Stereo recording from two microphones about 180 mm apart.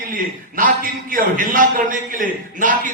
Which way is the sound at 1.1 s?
50° right (ahead or behind).